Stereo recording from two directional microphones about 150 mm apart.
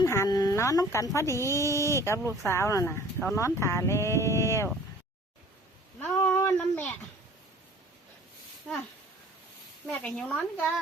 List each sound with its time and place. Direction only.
0.0 s speech: 20° left (ahead or behind)
6.0 s a sound: 15° left (ahead or behind)
9.9 s speech: 5° left (ahead or behind)